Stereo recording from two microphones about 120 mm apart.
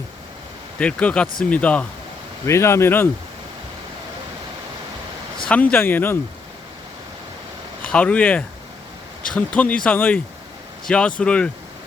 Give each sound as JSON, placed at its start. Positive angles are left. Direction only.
{"t": 0.8, "sound": "speech", "side_deg": 10}
{"t": 2.5, "sound": "speech", "side_deg": 25}
{"t": 5.5, "sound": "speech", "side_deg": 10}
{"t": 7.8, "sound": "speech", "side_deg": 10}